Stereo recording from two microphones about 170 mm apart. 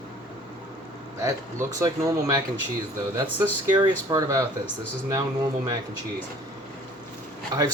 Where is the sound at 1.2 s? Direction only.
20° right (ahead or behind).